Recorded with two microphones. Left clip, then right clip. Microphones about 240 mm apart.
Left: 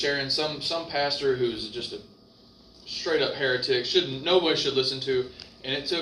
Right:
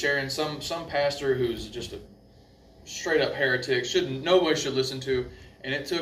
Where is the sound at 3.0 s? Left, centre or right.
Right.